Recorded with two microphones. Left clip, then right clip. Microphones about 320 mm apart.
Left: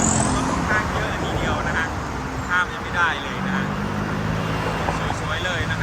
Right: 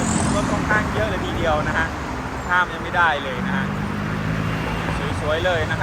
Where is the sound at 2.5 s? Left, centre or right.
Centre.